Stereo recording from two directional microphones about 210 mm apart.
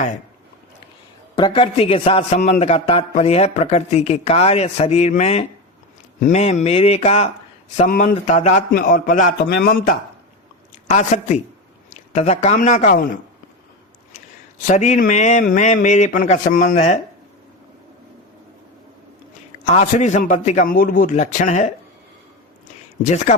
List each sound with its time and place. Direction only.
1.4 s a man's voice: 25° left (ahead or behind); by 9.9 s 50° left (ahead or behind)
10.8 s a man's voice: 35° left (ahead or behind)
14.7 s a man's voice: 35° left (ahead or behind)
19.7 s a man's voice: 35° left (ahead or behind)
23.0 s a man's voice: 35° left (ahead or behind)